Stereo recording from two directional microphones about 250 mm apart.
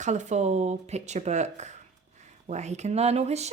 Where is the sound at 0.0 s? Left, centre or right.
Right.